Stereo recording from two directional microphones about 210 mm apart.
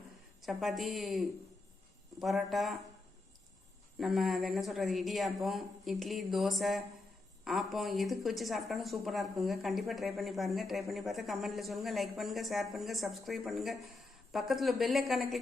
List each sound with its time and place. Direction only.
0.4 s speech: centre (ahead or behind)
3.9 s speech: centre (ahead or behind)